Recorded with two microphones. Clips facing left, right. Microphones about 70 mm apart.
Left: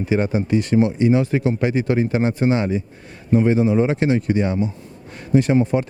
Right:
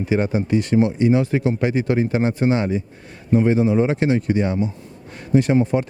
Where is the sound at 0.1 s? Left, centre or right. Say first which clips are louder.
Even; left.